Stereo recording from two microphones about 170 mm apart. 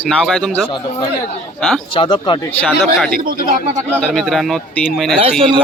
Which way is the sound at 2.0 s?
30° left (ahead or behind).